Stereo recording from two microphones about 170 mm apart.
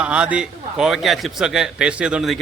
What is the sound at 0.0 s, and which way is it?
A man's voice, 5° right (ahead or behind).